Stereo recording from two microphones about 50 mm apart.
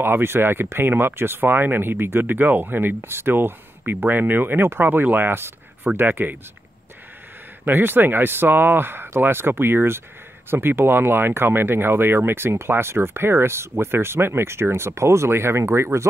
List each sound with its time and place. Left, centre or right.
0.0 s speech: right
7.6 s speech: right